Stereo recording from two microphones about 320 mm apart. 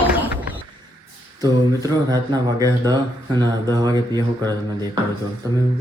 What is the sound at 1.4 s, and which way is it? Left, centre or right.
Speech, centre.